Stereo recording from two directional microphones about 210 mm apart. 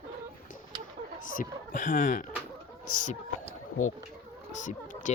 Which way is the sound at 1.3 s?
40° left (ahead or behind).